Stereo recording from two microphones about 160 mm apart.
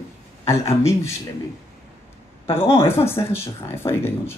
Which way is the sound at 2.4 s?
15° left (ahead or behind).